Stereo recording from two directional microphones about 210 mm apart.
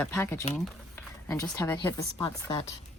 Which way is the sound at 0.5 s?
10° left (ahead or behind).